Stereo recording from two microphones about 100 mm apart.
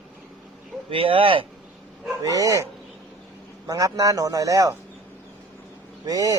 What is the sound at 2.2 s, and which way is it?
Speech, 35° right (ahead or behind).